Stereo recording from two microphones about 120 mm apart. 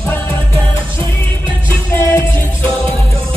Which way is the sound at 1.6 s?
20° left (ahead or behind).